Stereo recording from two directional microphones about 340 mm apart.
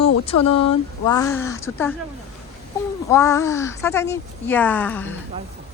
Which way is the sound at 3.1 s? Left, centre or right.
Centre.